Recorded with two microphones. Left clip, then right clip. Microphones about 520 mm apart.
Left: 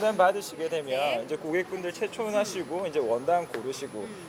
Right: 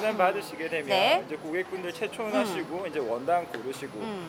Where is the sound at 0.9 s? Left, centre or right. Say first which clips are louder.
Right 6 dB; right.